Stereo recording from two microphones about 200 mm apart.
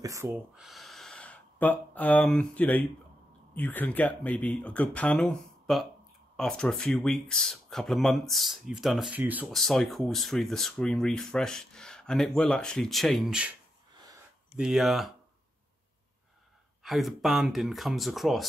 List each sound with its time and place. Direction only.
0.0 s speech: 15° right (ahead or behind)
0.3 s speech: centre (ahead or behind)
14.6 s speech: centre (ahead or behind)
16.8 s speech: centre (ahead or behind)